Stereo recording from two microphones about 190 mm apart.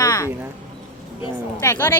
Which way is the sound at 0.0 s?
20° left (ahead or behind).